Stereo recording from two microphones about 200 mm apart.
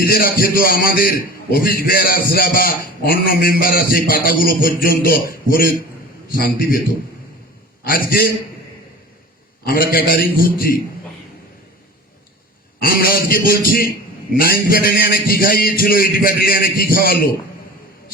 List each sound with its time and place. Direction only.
0.0 s a man's voice: 50° left (ahead or behind)
7.9 s a man's voice: 45° left (ahead or behind)
9.6 s a man's voice: 45° left (ahead or behind)
12.8 s a man's voice: 45° left (ahead or behind)